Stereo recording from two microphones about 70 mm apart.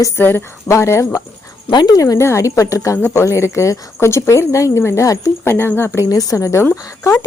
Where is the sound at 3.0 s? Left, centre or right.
Left.